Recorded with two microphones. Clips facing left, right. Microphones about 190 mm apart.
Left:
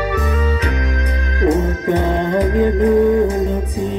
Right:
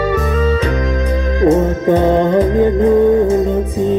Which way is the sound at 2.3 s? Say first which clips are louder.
Right 3 dB; 25° right (ahead or behind).